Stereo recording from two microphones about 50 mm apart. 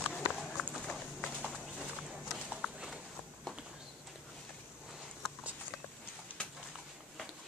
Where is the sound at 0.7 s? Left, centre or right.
Left.